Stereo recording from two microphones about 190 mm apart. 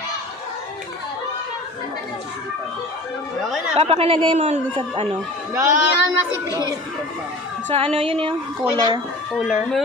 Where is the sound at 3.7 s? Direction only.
30° right (ahead or behind).